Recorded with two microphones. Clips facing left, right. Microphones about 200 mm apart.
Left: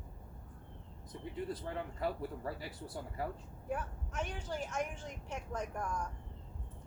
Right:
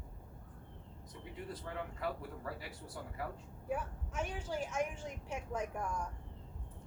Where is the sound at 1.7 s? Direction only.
30° left (ahead or behind).